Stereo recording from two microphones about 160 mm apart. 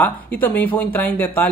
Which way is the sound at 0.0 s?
10° left (ahead or behind).